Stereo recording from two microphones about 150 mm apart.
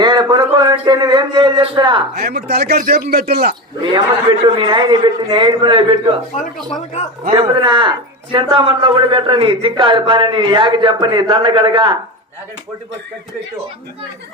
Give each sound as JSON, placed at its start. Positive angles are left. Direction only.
{"t": 0.0, "sound": "a man's voice", "side_deg": -30}
{"t": 2.1, "sound": "a man's voice", "side_deg": -90}
{"t": 3.9, "sound": "speech", "side_deg": -30}
{"t": 7.3, "sound": "speech", "side_deg": -35}